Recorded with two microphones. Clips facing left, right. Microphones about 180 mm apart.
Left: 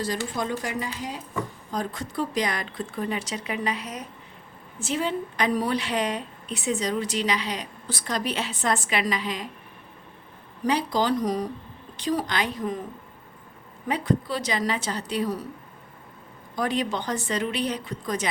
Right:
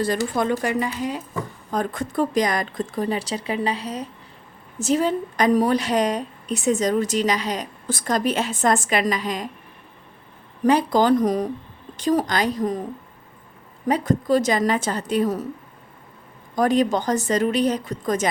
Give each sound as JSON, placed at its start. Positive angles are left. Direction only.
{"t": 0.3, "sound": "a woman's voice", "side_deg": -60}
{"t": 10.6, "sound": "a woman's voice", "side_deg": -50}
{"t": 16.6, "sound": "a woman's voice", "side_deg": -45}